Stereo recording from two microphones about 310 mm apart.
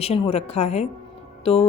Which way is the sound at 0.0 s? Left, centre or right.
Centre.